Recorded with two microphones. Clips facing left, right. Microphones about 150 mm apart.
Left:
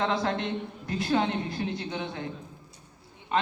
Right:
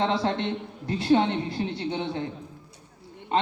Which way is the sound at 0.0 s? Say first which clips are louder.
Right 2 dB; 30° right (ahead or behind).